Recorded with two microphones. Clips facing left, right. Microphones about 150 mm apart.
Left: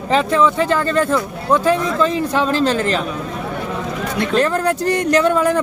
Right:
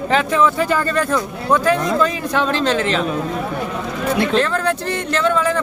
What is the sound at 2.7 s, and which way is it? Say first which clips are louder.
Speech: even; 40° left (ahead or behind).